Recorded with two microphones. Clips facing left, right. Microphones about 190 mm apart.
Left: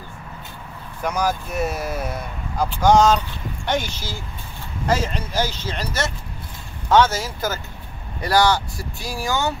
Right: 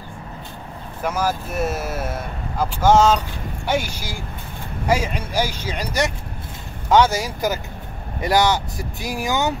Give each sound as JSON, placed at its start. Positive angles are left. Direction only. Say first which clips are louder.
{"t": 1.0, "sound": "speech", "louder": "even", "side_deg": -5}